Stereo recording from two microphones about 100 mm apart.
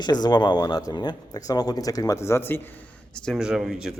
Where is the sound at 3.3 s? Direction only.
5° right (ahead or behind).